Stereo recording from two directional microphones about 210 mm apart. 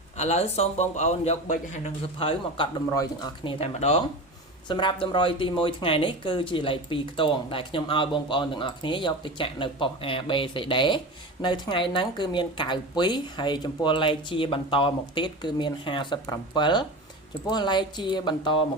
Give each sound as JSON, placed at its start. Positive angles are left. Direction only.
{"t": 0.2, "sound": "speech", "side_deg": 30}